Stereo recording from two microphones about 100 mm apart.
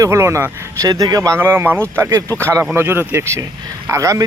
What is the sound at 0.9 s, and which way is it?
Speech, 40° right (ahead or behind).